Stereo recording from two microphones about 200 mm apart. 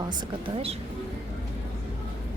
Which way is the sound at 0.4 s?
30° right (ahead or behind).